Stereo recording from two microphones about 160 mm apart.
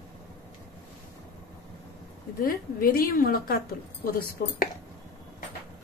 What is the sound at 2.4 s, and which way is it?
A woman's voice, 65° left (ahead or behind).